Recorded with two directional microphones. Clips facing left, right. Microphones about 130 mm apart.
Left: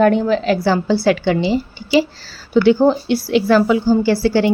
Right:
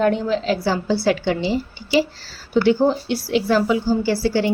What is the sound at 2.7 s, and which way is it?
A woman's voice, 75° left (ahead or behind).